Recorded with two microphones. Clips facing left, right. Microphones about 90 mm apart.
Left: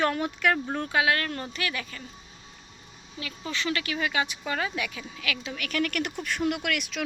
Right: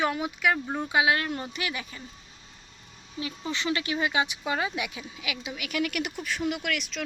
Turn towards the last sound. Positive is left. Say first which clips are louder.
# left 1 dB
turn(degrees=0)  # may be behind; listen again after turning